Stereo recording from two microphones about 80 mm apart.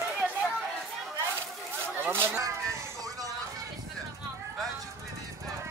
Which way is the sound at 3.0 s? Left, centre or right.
Right.